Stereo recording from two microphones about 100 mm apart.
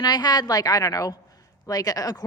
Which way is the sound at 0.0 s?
45° left (ahead or behind).